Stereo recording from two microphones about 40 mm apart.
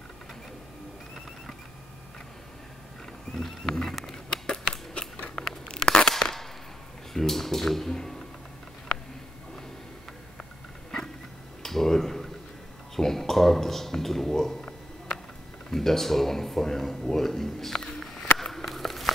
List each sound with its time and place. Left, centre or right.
3.3 s speech: centre
4.5 s scissors: centre
5.7 s tearing: centre
7.2 s speech: centre
11.6 s a sound: centre
12.9 s speech: centre
17.9 s a sound: centre